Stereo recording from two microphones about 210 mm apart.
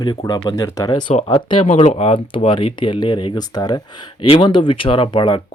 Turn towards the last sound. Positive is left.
turn(degrees=25)  # may be behind; listen again after turning